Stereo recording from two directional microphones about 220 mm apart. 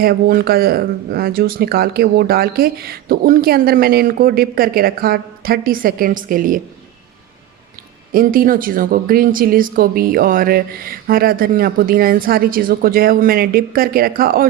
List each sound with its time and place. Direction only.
0.0 s speech: 45° right (ahead or behind)
8.1 s speech: 40° right (ahead or behind)